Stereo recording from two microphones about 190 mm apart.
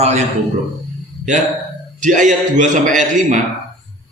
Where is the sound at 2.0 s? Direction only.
40° right (ahead or behind).